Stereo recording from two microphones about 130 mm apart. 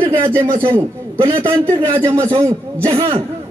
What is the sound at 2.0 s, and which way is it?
Speech, 20° right (ahead or behind).